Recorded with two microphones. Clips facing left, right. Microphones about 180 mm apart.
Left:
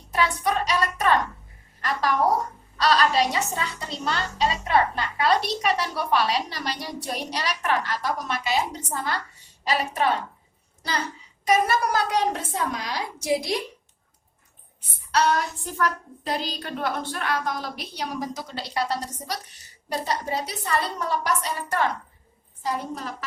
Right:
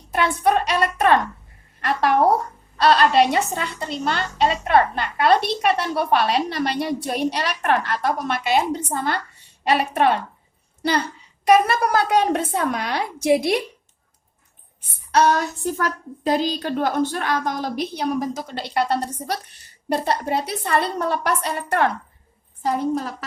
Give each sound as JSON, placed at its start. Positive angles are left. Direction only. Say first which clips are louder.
{"t": 0.1, "sound": "a woman's voice", "louder": "right 5 dB", "side_deg": -60}
{"t": 11.4, "sound": "a woman's voice", "louder": "right 5 dB", "side_deg": -60}
{"t": 15.8, "sound": "a woman's voice", "louder": "right 2 dB", "side_deg": -40}